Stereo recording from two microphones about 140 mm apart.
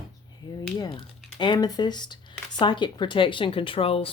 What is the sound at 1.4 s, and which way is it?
Speech, 30° left (ahead or behind).